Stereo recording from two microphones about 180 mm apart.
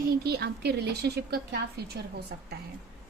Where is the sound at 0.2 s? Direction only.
60° right (ahead or behind).